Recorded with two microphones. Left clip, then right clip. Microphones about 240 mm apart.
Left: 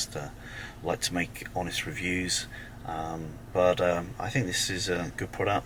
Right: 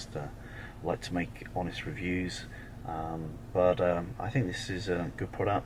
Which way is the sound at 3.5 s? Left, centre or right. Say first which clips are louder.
Left 2 dB; centre.